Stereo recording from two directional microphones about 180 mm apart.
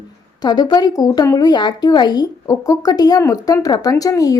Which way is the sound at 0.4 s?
20° left (ahead or behind).